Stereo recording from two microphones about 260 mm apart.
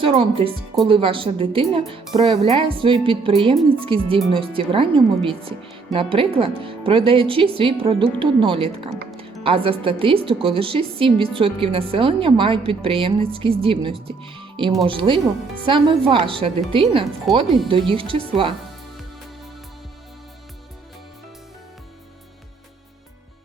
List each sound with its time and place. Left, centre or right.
0.0 s a woman's voice: right
17.3 s speech: centre
17.7 s a woman's voice: centre